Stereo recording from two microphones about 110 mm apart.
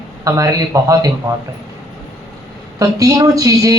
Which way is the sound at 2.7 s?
30° right (ahead or behind).